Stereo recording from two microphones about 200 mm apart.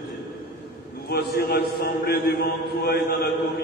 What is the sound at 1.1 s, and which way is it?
A man's voice, 50° left (ahead or behind).